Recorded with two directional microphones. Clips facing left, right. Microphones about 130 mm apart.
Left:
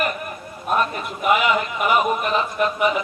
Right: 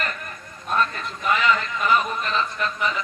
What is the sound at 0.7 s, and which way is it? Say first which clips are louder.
A man's voice: left 3 dB; 15° left (ahead or behind).